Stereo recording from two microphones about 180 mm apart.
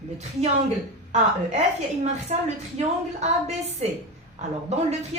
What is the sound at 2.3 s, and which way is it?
A woman's voice, 40° right (ahead or behind).